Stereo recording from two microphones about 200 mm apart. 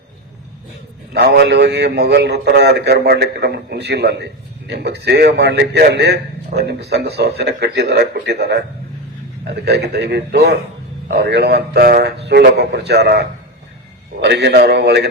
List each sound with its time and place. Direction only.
1.1 s a man's voice: 55° right (ahead or behind)